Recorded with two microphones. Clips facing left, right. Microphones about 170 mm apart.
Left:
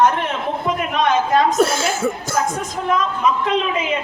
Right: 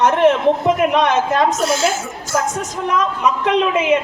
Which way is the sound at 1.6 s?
55° left (ahead or behind).